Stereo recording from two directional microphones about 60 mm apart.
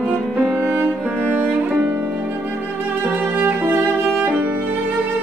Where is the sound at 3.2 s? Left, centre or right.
Right.